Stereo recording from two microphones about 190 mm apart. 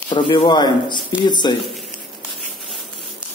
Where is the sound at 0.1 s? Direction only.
25° left (ahead or behind).